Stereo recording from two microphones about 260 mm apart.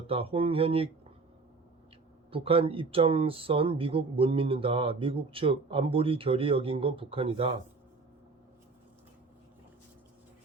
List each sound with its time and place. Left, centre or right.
0.1 s speech: right
2.3 s speech: right